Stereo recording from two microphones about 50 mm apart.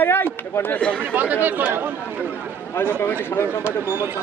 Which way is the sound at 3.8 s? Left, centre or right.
Right.